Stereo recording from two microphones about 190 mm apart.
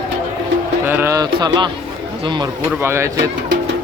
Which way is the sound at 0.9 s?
10° right (ahead or behind).